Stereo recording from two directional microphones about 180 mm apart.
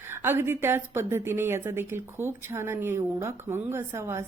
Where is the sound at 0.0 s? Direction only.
10° right (ahead or behind).